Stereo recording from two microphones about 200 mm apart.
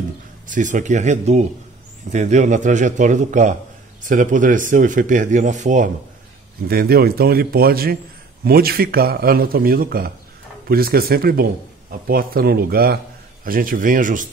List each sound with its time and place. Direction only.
0.5 s speech: 40° right (ahead or behind)
6.7 s speech: 50° right (ahead or behind)